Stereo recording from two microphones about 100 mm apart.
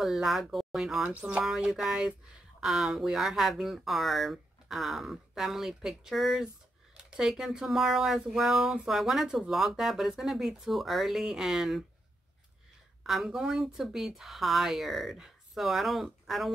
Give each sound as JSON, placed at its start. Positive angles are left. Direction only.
{"t": 0.0, "sound": "speech", "side_deg": -5}
{"t": 1.0, "sound": "speech", "side_deg": -10}
{"t": 13.0, "sound": "speech", "side_deg": -5}